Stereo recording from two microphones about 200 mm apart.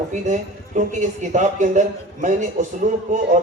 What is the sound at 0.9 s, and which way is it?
Speech, 40° right (ahead or behind).